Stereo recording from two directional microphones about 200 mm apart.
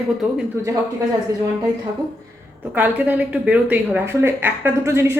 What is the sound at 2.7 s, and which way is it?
Speech, 10° right (ahead or behind).